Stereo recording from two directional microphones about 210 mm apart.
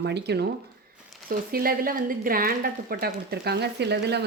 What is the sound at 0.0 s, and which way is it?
Speech, 55° right (ahead or behind).